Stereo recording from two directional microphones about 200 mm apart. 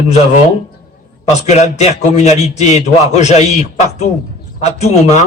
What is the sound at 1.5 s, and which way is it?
Speech, 35° left (ahead or behind).